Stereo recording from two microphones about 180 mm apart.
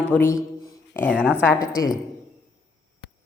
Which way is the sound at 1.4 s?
20° left (ahead or behind).